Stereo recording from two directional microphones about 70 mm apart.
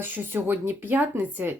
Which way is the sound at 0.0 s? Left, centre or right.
Right.